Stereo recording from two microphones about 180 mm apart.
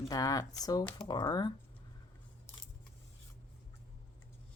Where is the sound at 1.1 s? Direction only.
25° left (ahead or behind).